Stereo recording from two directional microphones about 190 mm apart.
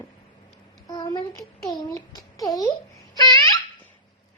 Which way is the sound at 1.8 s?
20° left (ahead or behind).